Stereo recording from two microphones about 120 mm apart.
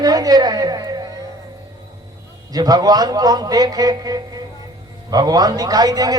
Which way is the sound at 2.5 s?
35° right (ahead or behind).